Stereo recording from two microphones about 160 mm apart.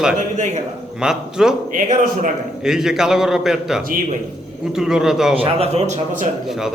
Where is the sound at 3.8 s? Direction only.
60° right (ahead or behind).